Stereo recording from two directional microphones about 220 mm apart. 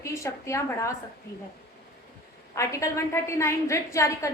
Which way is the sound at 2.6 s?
15° left (ahead or behind).